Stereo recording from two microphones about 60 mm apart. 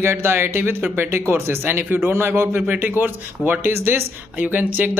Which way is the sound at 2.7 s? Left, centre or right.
Right.